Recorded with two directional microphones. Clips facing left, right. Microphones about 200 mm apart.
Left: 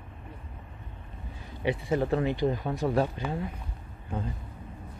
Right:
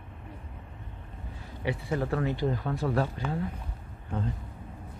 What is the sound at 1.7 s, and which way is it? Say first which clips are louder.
Speech: left 3 dB; 20° left (ahead or behind).